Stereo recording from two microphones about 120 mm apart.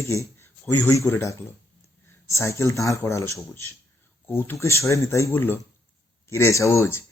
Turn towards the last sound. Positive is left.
turn(degrees=20)  # may be behind; listen again after turning